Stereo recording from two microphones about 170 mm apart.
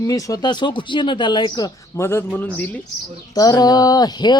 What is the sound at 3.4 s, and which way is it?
Speech, 20° left (ahead or behind).